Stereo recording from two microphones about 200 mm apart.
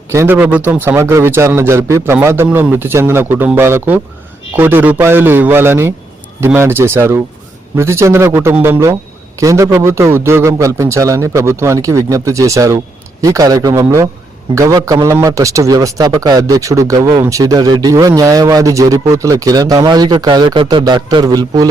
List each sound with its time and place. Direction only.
0.1 s a man's voice: 10° right (ahead or behind)